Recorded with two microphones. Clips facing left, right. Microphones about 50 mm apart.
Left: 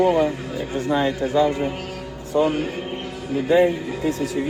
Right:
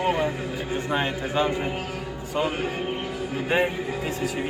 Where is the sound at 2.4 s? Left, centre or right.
Right.